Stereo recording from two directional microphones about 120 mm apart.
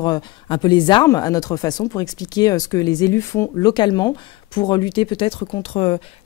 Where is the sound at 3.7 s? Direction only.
40° left (ahead or behind).